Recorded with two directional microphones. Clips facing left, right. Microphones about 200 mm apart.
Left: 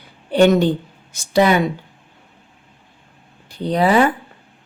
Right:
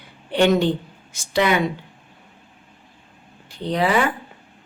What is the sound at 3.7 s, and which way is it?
Speech, 40° left (ahead or behind).